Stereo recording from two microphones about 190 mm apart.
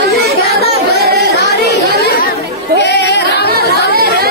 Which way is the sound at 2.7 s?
60° left (ahead or behind).